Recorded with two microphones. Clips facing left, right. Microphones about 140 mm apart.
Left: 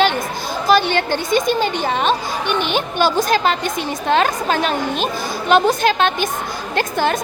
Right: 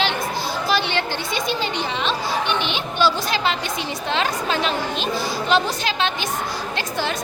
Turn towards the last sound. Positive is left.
turn(degrees=55)  # may be behind; listen again after turning